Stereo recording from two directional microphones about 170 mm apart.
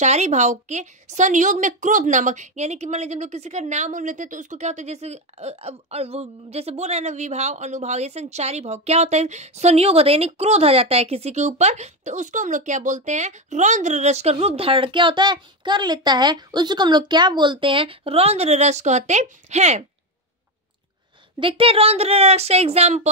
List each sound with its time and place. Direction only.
0.0 s a woman's voice: 40° right (ahead or behind)
21.4 s a woman's voice: 30° right (ahead or behind)